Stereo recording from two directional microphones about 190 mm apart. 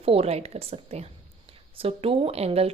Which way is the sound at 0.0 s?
30° right (ahead or behind).